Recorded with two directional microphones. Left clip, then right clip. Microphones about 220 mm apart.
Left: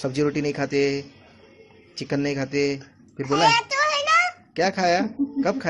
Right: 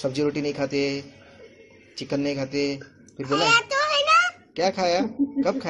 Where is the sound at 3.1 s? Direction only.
15° left (ahead or behind).